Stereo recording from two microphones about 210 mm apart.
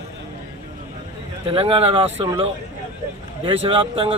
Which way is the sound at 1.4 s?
25° right (ahead or behind).